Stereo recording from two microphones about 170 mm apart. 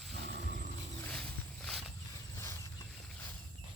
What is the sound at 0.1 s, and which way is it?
Wild animals, 75° right (ahead or behind).